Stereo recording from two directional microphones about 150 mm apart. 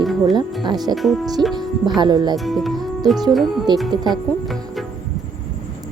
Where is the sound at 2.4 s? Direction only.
Centre (ahead or behind).